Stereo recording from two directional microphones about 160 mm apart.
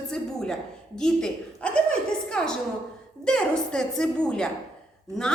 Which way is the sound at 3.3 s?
5° left (ahead or behind).